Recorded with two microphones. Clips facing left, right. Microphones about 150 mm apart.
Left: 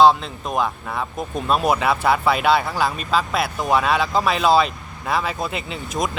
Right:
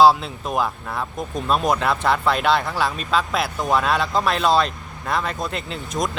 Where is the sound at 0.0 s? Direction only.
5° right (ahead or behind).